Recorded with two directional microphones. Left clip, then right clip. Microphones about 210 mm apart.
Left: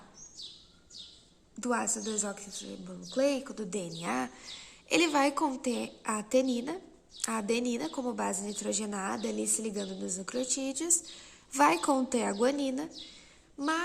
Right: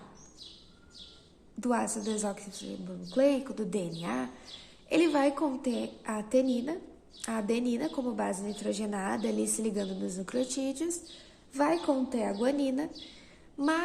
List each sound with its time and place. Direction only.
1.6 s a woman's voice: 15° left (ahead or behind)
11.5 s a woman's voice: 40° left (ahead or behind); by 13.1 s 20° left (ahead or behind)
13.6 s a woman's voice: 10° left (ahead or behind)